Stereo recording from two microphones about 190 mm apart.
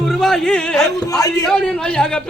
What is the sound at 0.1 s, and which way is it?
A man's voice, centre (ahead or behind).